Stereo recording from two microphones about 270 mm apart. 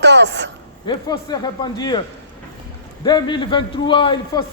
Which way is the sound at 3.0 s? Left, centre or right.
Centre.